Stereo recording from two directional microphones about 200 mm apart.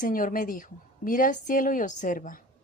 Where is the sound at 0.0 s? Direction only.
40° left (ahead or behind).